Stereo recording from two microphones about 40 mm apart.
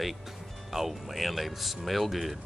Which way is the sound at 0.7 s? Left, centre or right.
Centre.